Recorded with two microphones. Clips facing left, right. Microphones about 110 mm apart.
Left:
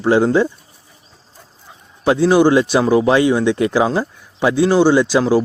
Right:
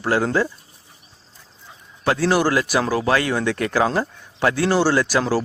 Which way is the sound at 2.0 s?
20° left (ahead or behind).